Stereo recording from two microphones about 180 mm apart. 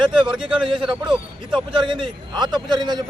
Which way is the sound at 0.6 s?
30° right (ahead or behind).